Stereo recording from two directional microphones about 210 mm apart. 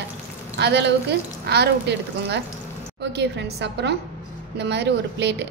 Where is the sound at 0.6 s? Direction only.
55° right (ahead or behind).